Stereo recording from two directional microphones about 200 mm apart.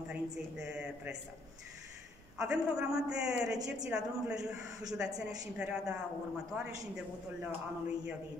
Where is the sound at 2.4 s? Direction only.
5° right (ahead or behind).